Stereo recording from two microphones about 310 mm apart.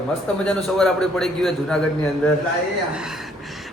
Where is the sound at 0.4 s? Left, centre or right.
Centre.